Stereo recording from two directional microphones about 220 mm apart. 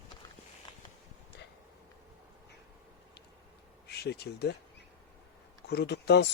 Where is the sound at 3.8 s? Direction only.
50° left (ahead or behind).